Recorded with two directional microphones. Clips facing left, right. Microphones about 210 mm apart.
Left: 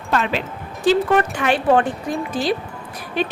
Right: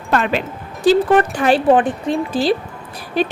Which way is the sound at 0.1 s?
55° right (ahead or behind).